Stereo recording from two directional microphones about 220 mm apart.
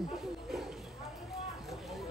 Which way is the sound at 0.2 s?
Centre (ahead or behind).